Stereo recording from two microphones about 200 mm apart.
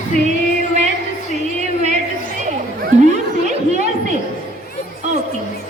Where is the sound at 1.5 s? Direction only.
35° right (ahead or behind).